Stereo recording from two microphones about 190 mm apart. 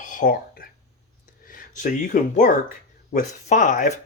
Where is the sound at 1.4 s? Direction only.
45° left (ahead or behind).